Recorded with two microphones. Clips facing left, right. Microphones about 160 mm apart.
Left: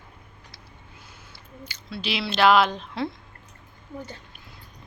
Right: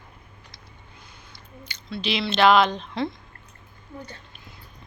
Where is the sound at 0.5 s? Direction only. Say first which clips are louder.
Even; 5° left (ahead or behind).